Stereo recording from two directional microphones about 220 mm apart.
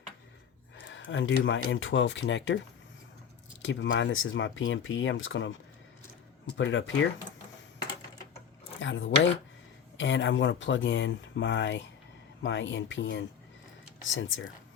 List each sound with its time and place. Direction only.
0.8 s speech: 60° left (ahead or behind)
3.6 s speech: 55° left (ahead or behind)
6.6 s speech: 55° left (ahead or behind)
8.8 s speech: 55° left (ahead or behind)